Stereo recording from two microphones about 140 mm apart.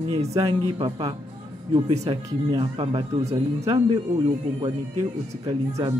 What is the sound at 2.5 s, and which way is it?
Speech, 40° right (ahead or behind).